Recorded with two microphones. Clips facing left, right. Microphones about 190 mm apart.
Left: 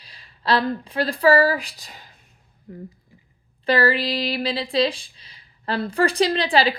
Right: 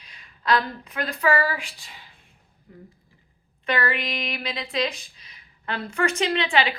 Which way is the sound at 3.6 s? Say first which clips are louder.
Left 6 dB; 35° left (ahead or behind).